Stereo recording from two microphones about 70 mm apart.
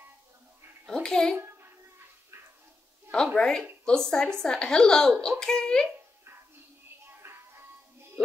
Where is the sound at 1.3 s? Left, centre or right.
Right.